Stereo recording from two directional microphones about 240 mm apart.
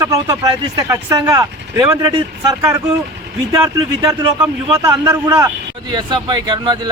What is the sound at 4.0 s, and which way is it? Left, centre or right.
A man's voice, centre.